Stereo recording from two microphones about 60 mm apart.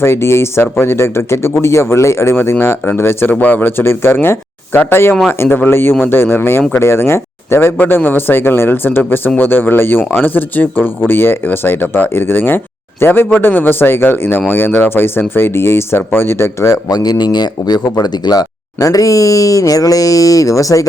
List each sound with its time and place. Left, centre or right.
0.0 s speech: left
3.3 s a man's voice: left
16.6 s a man's voice: left
17.8 s speech: left